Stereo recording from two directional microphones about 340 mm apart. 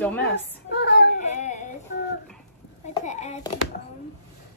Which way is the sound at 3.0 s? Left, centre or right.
Left.